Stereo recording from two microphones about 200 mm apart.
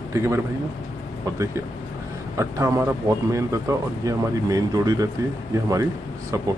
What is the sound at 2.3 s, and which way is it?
Speech, 15° right (ahead or behind).